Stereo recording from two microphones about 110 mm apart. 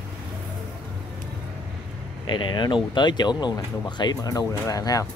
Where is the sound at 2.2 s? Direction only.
45° left (ahead or behind).